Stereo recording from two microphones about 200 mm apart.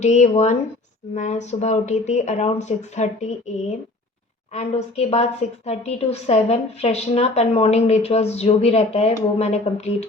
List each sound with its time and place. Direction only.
0.0 s a woman's voice: 35° left (ahead or behind)
4.5 s a woman's voice: 30° left (ahead or behind)